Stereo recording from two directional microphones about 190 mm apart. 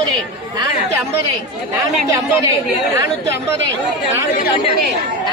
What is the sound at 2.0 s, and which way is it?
Speech, 15° right (ahead or behind).